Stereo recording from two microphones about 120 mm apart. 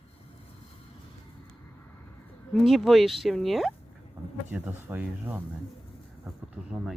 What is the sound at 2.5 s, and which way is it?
Speech, centre (ahead or behind).